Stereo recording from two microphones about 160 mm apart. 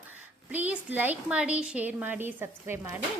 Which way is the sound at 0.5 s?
10° right (ahead or behind).